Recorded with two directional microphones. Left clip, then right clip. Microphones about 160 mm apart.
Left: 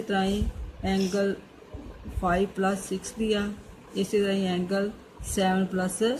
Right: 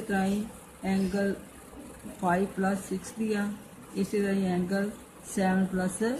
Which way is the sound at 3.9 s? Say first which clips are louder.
Left 4 dB; 25° left (ahead or behind).